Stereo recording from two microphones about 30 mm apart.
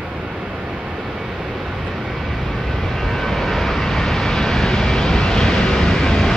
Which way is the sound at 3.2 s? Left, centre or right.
Centre.